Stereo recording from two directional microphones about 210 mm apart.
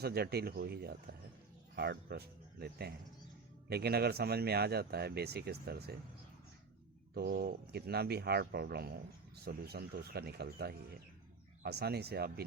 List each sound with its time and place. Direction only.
0.0 s speech: 50° right (ahead or behind)
7.1 s speech: 50° right (ahead or behind)